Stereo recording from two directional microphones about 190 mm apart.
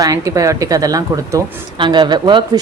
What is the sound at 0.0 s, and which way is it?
Speech, 15° right (ahead or behind).